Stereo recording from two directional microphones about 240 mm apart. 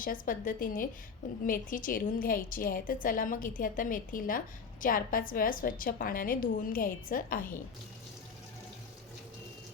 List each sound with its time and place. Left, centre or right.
0.0 s a woman's voice: left